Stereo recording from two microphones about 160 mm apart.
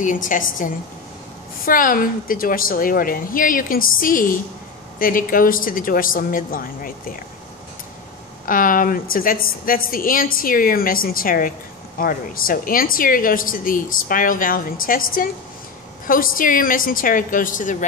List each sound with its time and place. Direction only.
0.0 s a woman's voice: 55° left (ahead or behind)
8.5 s a woman's voice: 60° left (ahead or behind)